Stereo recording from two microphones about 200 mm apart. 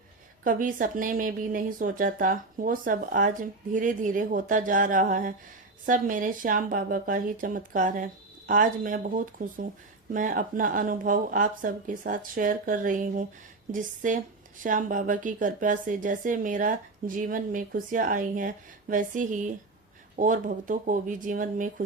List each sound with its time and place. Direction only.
0.4 s speech: 45° right (ahead or behind)